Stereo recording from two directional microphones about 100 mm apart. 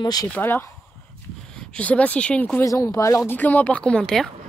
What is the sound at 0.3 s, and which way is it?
Speech, 20° left (ahead or behind).